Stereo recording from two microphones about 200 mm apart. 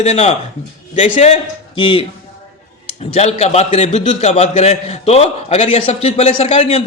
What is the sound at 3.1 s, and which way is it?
A man's voice, 35° left (ahead or behind).